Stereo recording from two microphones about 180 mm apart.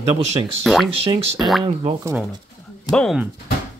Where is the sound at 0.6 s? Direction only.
Centre (ahead or behind).